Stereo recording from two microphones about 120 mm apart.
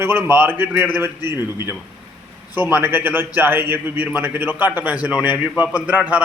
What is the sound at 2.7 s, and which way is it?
A man's voice, 15° right (ahead or behind).